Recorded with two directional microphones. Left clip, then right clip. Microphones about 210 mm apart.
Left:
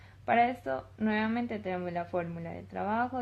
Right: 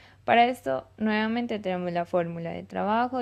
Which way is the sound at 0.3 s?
35° right (ahead or behind).